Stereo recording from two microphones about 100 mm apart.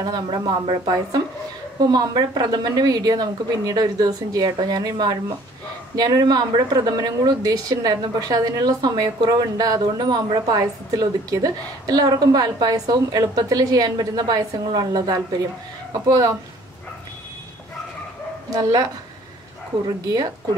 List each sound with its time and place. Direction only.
0.0 s a woman's voice: 45° right (ahead or behind)
18.5 s a woman's voice: 35° right (ahead or behind)